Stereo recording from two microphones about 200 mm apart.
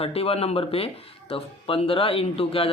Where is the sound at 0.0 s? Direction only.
30° left (ahead or behind).